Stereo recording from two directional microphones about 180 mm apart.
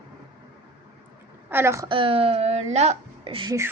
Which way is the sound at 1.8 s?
30° right (ahead or behind).